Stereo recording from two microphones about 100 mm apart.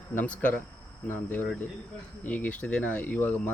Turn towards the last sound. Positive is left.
turn(degrees=15)  # may be behind; listen again after turning